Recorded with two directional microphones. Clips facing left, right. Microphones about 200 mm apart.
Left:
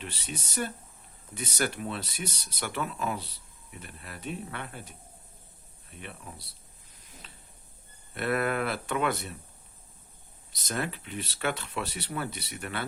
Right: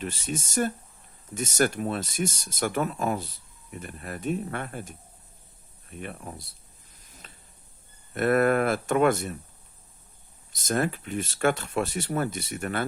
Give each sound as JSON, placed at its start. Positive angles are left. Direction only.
{"t": 0.0, "sound": "speech", "side_deg": -45}
{"t": 6.0, "sound": "speech", "side_deg": -45}
{"t": 8.1, "sound": "speech", "side_deg": -45}
{"t": 10.5, "sound": "speech", "side_deg": -45}